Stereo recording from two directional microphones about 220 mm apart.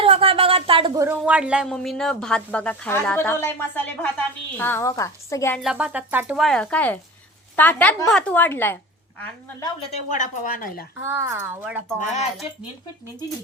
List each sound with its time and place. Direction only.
0.0 s a sound: 25° right (ahead or behind)
1.0 s a woman's voice: 5° right (ahead or behind); by 5.5 s 15° left (ahead or behind)
5.6 s a woman's voice: 5° right (ahead or behind); by 9.7 s 15° left (ahead or behind)
9.9 s speech: 35° left (ahead or behind)
11.0 s speech: 10° right (ahead or behind)
11.9 s speech: 30° left (ahead or behind)